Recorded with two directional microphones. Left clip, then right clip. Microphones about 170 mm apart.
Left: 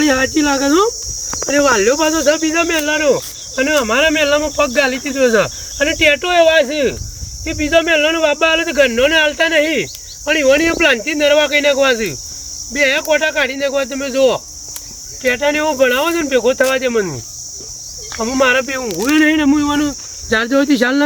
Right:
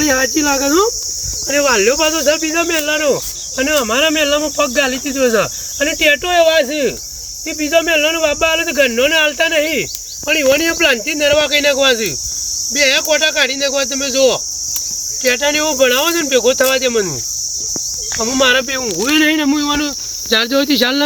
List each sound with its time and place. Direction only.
0.0 s speech: 5° left (ahead or behind)
18.2 s speech: 10° left (ahead or behind)